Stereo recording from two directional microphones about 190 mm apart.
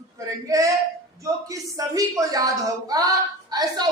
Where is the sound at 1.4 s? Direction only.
20° right (ahead or behind).